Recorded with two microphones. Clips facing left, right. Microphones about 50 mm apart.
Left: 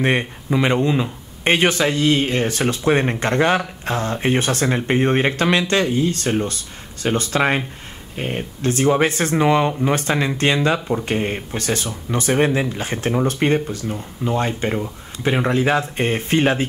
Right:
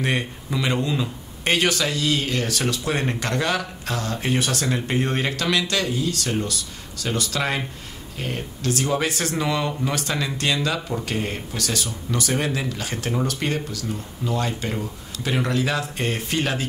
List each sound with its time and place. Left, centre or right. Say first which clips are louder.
0.0 s speech: left 5 dB; left